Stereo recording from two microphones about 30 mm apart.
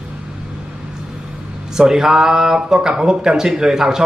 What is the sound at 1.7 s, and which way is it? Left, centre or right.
A man's voice, centre.